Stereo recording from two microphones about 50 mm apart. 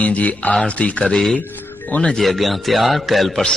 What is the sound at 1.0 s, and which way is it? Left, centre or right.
Speech, centre.